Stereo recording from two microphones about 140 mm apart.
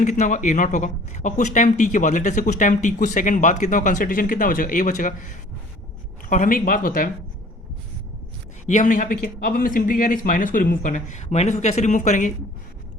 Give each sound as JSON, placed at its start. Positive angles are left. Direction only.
{"t": 0.0, "sound": "a man's voice", "side_deg": 60}
{"t": 8.6, "sound": "a man's voice", "side_deg": 65}